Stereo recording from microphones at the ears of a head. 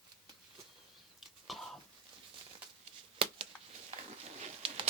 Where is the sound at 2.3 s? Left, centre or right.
Right.